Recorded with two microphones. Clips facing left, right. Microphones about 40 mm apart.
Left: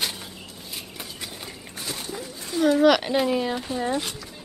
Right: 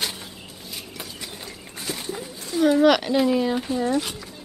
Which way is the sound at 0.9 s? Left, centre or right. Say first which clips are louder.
Right 1 dB; centre.